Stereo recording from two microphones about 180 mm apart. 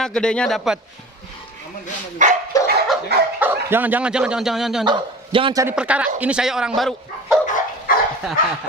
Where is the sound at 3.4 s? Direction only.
10° right (ahead or behind).